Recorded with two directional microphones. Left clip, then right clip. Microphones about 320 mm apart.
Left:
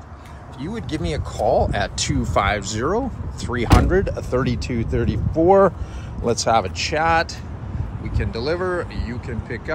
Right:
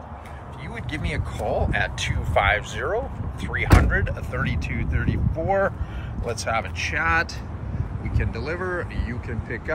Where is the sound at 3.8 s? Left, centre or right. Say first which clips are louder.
Left 5 dB; centre.